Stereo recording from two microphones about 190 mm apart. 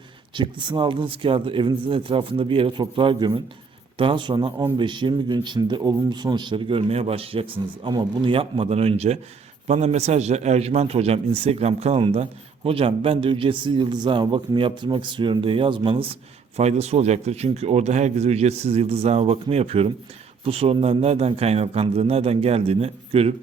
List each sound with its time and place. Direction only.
0.3 s a man's voice: 25° right (ahead or behind)